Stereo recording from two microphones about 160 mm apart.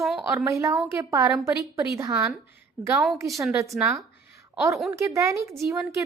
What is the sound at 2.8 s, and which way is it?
Speech, centre (ahead or behind).